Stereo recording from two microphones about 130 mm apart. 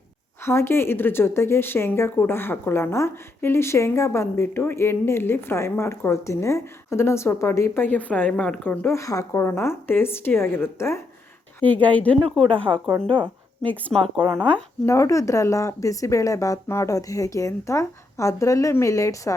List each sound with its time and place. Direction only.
0.4 s speech: 20° left (ahead or behind)
9.0 s speech: 25° left (ahead or behind)
12.7 s speech: 25° right (ahead or behind)
13.1 s a sound: 40° right (ahead or behind)
13.7 s speech: 10° left (ahead or behind)
14.8 s speech: 25° left (ahead or behind)